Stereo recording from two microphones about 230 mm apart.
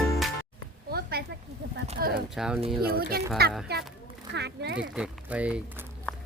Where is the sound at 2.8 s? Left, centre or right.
Right.